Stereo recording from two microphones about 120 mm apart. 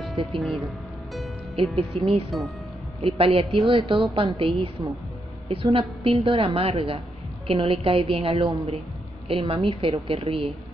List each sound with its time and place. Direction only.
0.3 s speech: centre (ahead or behind)
1.1 s music: centre (ahead or behind)
2.0 s a woman's voice: 55° right (ahead or behind)